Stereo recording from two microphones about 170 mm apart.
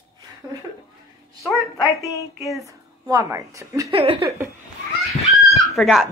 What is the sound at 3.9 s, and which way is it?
Laughter, 35° right (ahead or behind).